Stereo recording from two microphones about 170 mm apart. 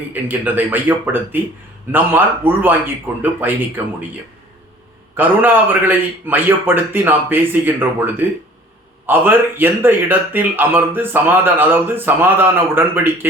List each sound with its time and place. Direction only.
0.1 s speech: 10° right (ahead or behind)
2.6 s speech: 10° right (ahead or behind)
5.1 s speech: 10° right (ahead or behind)